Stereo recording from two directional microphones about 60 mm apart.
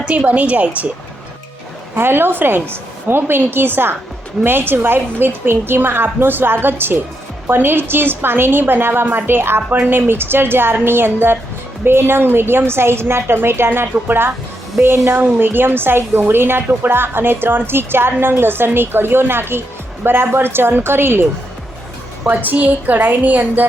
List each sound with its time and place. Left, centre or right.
0.1 s a woman's voice: right
2.0 s a woman's voice: right
9.6 s a woman's voice: right
9.9 s a woman's voice: right
22.3 s a woman's voice: right